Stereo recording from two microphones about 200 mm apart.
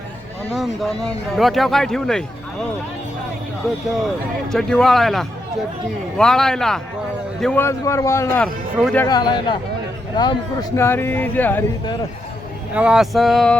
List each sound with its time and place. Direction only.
0.5 s speech: centre (ahead or behind)
4.4 s a man's voice: centre (ahead or behind)
7.6 s speech: 15° left (ahead or behind)
9.0 s speech: 20° left (ahead or behind)
12.7 s speech: 5° right (ahead or behind)